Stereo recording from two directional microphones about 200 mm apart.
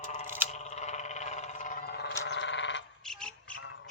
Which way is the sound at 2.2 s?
65° left (ahead or behind).